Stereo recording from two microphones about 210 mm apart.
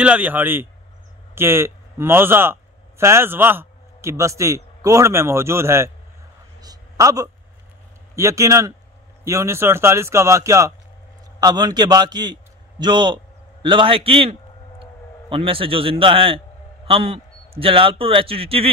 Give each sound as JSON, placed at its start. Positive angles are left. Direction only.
{"t": 0.0, "sound": "a man's voice", "side_deg": -5}
{"t": 6.6, "sound": "a sound", "side_deg": -15}
{"t": 8.2, "sound": "a man's voice", "side_deg": -15}